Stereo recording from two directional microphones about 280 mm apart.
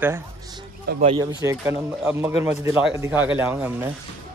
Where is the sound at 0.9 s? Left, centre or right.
Right.